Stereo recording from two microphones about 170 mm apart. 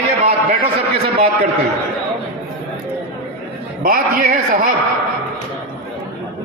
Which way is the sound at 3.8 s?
55° right (ahead or behind).